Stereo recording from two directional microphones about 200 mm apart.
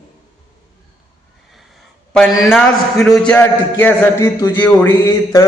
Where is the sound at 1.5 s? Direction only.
Centre (ahead or behind).